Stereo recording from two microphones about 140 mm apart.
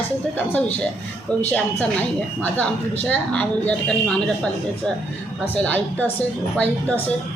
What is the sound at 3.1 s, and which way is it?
A woman's voice, 10° left (ahead or behind).